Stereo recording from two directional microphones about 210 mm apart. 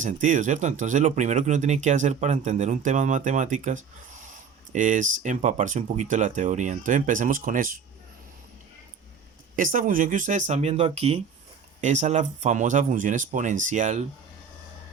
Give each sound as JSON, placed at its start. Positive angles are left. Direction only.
{"t": 0.0, "sound": "speech", "side_deg": -35}
{"t": 9.6, "sound": "speech", "side_deg": -40}